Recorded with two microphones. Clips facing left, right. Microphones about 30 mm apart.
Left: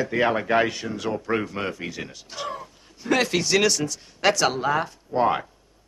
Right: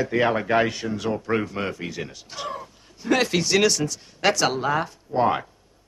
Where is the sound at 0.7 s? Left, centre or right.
Centre.